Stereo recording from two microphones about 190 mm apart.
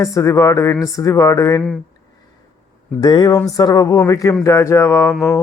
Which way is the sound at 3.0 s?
20° left (ahead or behind).